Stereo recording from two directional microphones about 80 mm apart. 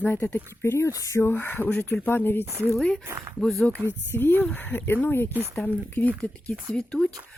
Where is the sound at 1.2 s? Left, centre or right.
Left.